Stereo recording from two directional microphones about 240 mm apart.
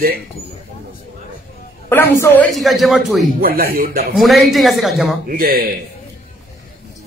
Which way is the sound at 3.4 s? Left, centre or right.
Right.